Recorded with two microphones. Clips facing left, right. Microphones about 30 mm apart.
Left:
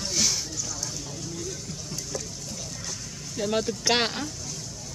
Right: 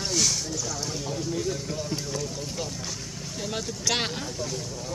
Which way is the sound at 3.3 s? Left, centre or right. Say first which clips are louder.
Left 6 dB; centre.